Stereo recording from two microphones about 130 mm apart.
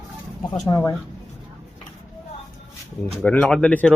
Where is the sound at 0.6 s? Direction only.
25° left (ahead or behind).